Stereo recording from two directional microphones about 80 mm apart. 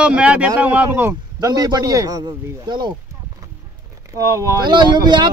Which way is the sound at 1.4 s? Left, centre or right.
Right.